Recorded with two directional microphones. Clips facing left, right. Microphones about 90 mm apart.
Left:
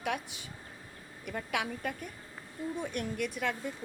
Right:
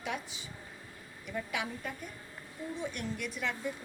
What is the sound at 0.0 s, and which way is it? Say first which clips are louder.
A woman's voice: left 3 dB; 55° left (ahead or behind).